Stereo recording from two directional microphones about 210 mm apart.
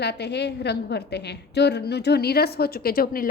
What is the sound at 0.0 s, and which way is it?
A woman's voice, 50° left (ahead or behind).